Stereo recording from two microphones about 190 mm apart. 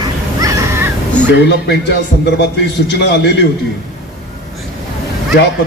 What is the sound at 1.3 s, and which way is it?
A man's voice, 65° left (ahead or behind).